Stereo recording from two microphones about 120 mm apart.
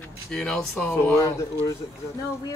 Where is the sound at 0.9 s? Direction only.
20° left (ahead or behind).